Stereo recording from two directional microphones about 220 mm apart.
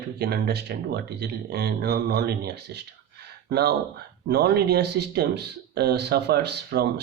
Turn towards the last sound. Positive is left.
turn(degrees=-50)  # may be behind; listen again after turning